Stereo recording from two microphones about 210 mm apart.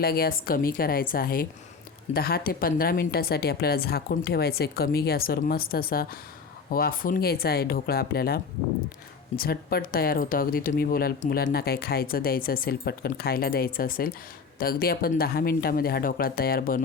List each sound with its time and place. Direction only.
0.0 s speech: 45° left (ahead or behind)